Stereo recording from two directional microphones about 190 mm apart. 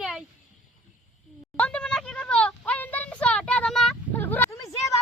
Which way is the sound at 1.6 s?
5° left (ahead or behind).